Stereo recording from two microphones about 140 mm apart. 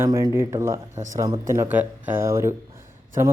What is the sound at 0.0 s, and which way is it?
A man's voice, 20° right (ahead or behind).